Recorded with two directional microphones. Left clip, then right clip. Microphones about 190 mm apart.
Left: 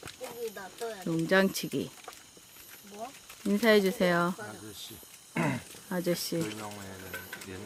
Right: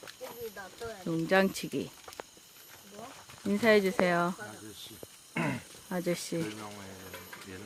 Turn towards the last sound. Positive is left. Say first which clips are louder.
# left 2 dB
turn(degrees=0)  # may be behind; listen again after turning